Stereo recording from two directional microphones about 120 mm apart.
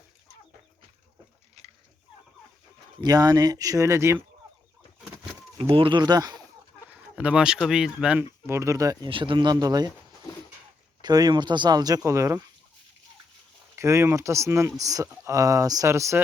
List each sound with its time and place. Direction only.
3.0 s speech: 35° right (ahead or behind)
5.5 s speech: 50° right (ahead or behind)
7.2 s speech: 10° right (ahead or behind)
8.4 s speech: 25° right (ahead or behind)
9.0 s speech: 45° right (ahead or behind)
11.0 s speech: 35° right (ahead or behind)
13.7 s speech: 25° right (ahead or behind)